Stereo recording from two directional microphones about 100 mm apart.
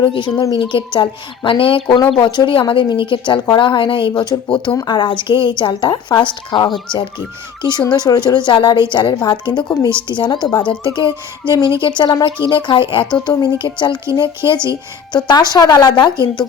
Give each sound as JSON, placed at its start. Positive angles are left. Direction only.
{"t": 0.0, "sound": "a woman's voice", "side_deg": 55}
{"t": 2.1, "sound": "a woman's voice", "side_deg": 50}
{"t": 6.7, "sound": "speech", "side_deg": 0}
{"t": 7.6, "sound": "a woman's voice", "side_deg": 45}
{"t": 13.2, "sound": "a woman's voice", "side_deg": 45}